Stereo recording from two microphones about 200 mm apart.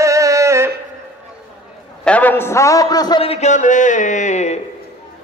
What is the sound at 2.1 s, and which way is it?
A man's voice, 10° left (ahead or behind).